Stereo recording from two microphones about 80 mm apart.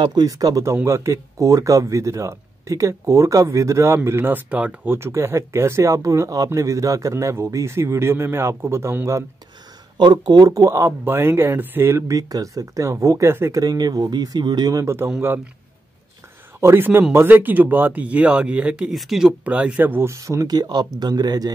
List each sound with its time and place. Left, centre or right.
0.0 s speech: right
4.5 s speech: centre
4.9 s speech: right
9.9 s speech: right
10.5 s speech: right
11.1 s speech: right
12.2 s speech: right
13.6 s speech: right
15.1 s speech: right
16.5 s speech: right
18.9 s speech: centre
19.4 s speech: centre
20.1 s speech: right
20.4 s speech: right